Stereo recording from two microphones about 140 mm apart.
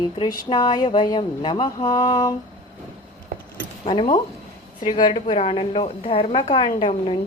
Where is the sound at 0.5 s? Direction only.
30° left (ahead or behind).